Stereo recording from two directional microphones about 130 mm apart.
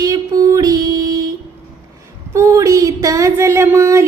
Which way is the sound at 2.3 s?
25° right (ahead or behind).